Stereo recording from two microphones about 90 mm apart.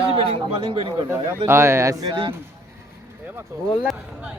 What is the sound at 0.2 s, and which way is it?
Speech, 70° right (ahead or behind).